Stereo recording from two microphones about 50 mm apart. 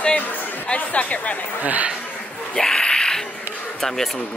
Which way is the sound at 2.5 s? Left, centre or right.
Centre.